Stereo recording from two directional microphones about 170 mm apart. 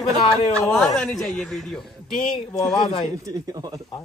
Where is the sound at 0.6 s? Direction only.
5° left (ahead or behind).